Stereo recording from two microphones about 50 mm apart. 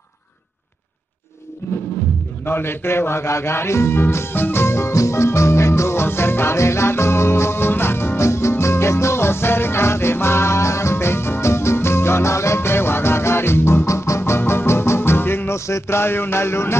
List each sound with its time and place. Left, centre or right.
1.6 s music: left
2.4 s music: left
13.8 s music: left
15.5 s a sound: left
16.0 s music: left